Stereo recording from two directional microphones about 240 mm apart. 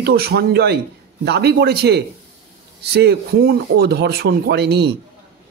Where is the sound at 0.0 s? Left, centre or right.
Right.